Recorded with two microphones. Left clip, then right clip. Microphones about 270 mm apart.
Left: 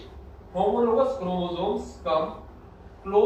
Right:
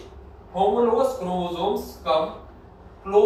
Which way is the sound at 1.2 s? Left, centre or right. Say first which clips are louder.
Right 2 dB; centre.